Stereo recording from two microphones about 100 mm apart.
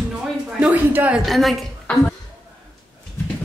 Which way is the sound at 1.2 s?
Centre (ahead or behind).